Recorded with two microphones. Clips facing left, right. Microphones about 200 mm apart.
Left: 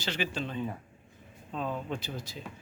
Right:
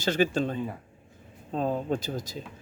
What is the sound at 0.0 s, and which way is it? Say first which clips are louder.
Speech: right 9 dB; 45° right (ahead or behind).